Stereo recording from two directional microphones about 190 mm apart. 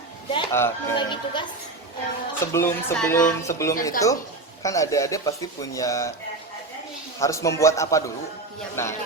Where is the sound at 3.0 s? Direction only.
10° left (ahead or behind).